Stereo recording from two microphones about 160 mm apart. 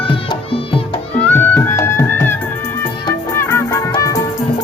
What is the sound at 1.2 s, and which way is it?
Music, 10° left (ahead or behind).